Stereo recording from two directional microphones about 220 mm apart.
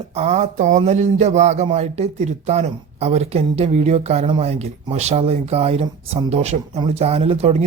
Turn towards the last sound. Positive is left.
turn(degrees=-30)  # may be behind; listen again after turning